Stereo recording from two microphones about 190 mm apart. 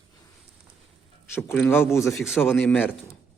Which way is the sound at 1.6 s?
10° left (ahead or behind).